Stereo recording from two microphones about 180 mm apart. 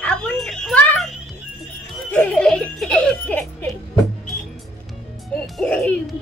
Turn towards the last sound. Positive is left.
turn(degrees=5)  # may be behind; listen again after turning